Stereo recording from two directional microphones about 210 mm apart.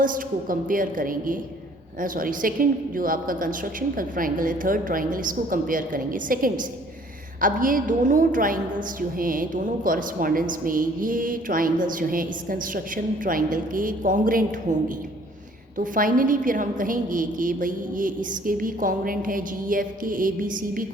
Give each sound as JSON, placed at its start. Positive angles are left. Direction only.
{"t": 0.0, "sound": "a woman's voice", "side_deg": -40}